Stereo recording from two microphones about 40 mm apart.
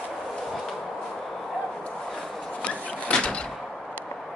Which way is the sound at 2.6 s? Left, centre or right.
Left.